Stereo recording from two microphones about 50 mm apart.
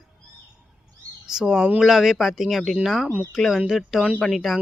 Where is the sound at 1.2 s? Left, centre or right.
Centre.